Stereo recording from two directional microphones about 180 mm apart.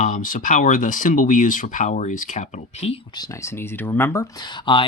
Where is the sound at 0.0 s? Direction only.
45° left (ahead or behind).